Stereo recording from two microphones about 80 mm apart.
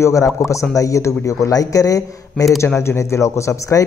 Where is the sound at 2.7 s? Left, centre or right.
Left.